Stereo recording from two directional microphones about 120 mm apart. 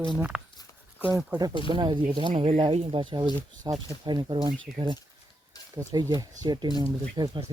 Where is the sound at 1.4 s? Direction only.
35° right (ahead or behind).